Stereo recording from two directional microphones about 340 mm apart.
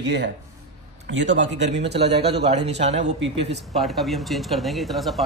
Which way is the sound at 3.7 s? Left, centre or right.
Centre.